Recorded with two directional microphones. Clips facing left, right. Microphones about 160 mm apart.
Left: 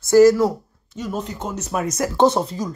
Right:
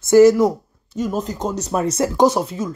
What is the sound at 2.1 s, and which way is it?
Speech, 10° right (ahead or behind).